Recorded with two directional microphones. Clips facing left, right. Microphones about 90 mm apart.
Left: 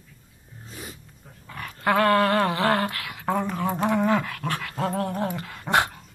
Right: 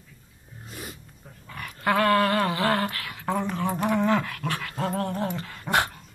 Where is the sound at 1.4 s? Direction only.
20° left (ahead or behind).